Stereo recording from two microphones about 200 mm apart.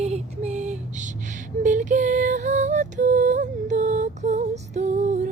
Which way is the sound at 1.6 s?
40° right (ahead or behind).